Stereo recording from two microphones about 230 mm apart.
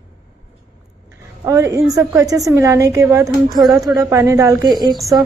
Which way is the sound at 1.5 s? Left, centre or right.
Centre.